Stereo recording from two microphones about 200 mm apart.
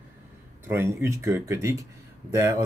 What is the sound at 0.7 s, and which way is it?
Speech, 15° right (ahead or behind).